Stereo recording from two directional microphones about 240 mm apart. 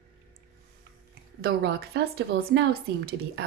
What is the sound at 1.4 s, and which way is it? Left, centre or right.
A woman's voice, right.